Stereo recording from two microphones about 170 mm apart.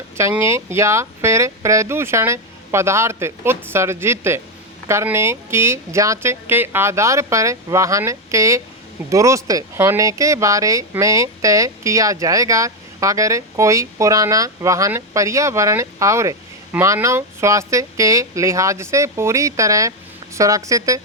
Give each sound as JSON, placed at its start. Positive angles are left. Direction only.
{"t": 0.2, "sound": "speech", "side_deg": -15}